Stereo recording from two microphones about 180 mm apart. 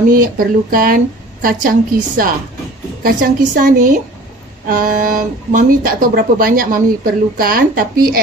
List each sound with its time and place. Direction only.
0.1 s speech: 50° right (ahead or behind)